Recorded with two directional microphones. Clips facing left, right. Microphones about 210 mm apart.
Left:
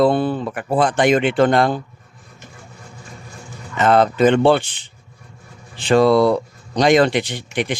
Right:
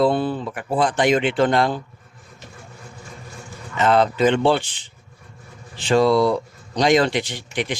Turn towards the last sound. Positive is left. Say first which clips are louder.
# left 3 dB
turn(degrees=55)  # may be behind; listen again after turning